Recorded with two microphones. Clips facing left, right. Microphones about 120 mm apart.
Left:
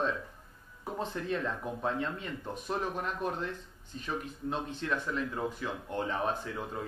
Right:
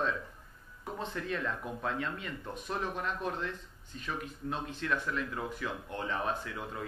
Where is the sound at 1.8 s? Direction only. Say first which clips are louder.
Left 2 dB; 30° left (ahead or behind).